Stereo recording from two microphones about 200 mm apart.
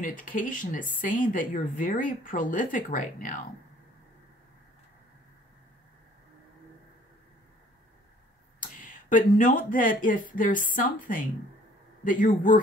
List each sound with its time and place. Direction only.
0.0 s speech: 45° left (ahead or behind)
8.5 s speech: 40° left (ahead or behind)